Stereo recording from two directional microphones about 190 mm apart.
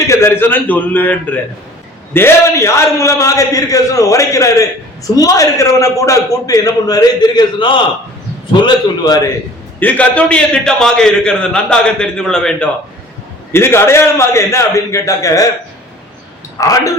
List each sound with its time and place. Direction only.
0.1 s a man's voice: 15° left (ahead or behind)
9.8 s a man's voice: 5° left (ahead or behind)
16.6 s a man's voice: 20° left (ahead or behind)